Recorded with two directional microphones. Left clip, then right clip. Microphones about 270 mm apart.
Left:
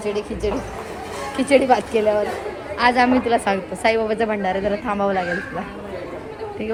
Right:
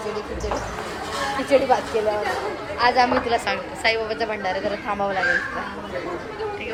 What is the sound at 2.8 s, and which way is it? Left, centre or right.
A woman's voice, left.